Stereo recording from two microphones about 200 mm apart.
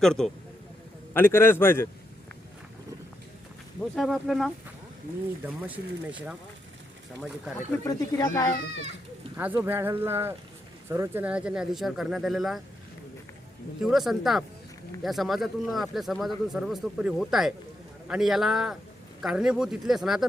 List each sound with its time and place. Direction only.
0.0 s a man's voice: 5° left (ahead or behind)
3.9 s speech: centre (ahead or behind)
5.6 s speech: 10° right (ahead or behind)
7.2 s speech: centre (ahead or behind)
7.9 s a man's voice: 15° left (ahead or behind)
9.4 s speech: 10° right (ahead or behind)
13.8 s speech: centre (ahead or behind)